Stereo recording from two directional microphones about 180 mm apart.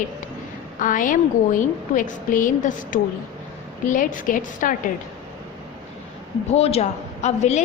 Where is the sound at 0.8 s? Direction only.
50° left (ahead or behind).